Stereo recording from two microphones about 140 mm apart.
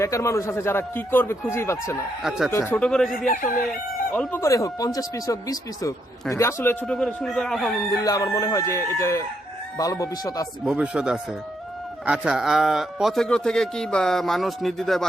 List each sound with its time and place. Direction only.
0.0 s speech: 20° left (ahead or behind)
2.8 s speech: 5° left (ahead or behind)
3.2 s speech: 75° left (ahead or behind)
4.1 s speech: 10° left (ahead or behind)
6.8 s speech: 5° left (ahead or behind)
7.9 s speech: 25° left (ahead or behind)
10.7 s speech: 10° right (ahead or behind)